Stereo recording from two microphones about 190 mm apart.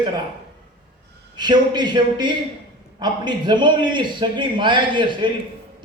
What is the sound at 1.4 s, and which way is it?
A man's voice, 25° right (ahead or behind).